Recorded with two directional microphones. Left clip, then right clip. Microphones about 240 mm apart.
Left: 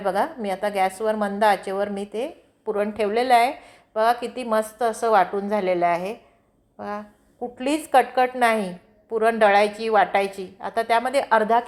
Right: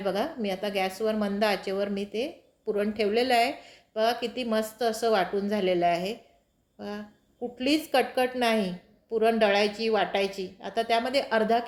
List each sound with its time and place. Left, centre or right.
0.0 s a woman's voice: centre